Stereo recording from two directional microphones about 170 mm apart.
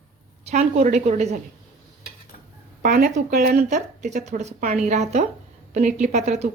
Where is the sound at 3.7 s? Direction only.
45° right (ahead or behind).